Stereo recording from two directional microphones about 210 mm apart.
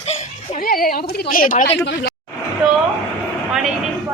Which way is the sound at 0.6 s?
45° left (ahead or behind).